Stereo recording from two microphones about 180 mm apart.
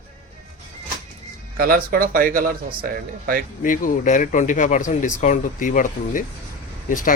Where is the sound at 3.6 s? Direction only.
50° left (ahead or behind).